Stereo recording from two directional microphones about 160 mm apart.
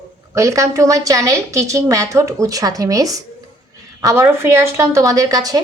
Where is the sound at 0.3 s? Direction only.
20° right (ahead or behind).